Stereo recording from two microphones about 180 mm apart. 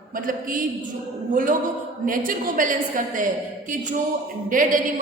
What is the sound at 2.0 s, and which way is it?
A woman's voice, 50° right (ahead or behind).